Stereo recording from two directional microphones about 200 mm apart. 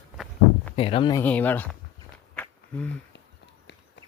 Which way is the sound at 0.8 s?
25° left (ahead or behind).